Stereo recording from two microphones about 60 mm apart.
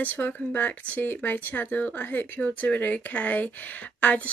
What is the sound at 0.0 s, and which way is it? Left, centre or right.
Speech, left.